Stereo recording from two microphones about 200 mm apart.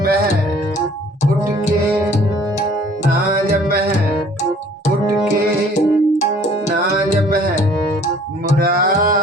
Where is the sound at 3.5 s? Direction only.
50° right (ahead or behind).